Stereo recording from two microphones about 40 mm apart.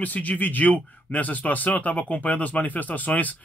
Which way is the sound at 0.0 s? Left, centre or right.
Left.